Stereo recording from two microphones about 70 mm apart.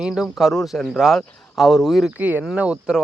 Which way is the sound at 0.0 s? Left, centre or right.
Centre.